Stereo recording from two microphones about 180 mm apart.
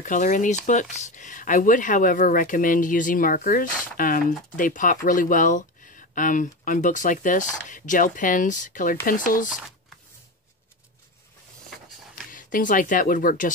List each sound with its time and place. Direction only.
0.0 s speech: 45° left (ahead or behind)
12.3 s speech: 50° left (ahead or behind)